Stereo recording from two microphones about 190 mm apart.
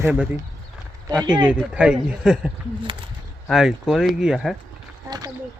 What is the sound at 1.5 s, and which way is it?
Speech, 5° right (ahead or behind).